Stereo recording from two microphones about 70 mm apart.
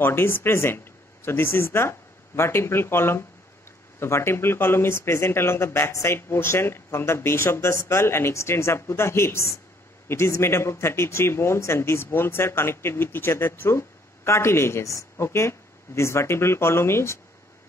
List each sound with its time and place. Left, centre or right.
0.0 s a man's voice: left